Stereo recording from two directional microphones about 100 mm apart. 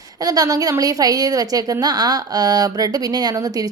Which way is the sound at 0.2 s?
40° right (ahead or behind).